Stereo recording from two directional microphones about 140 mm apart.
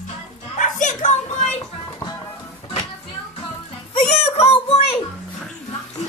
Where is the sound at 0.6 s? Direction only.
65° left (ahead or behind).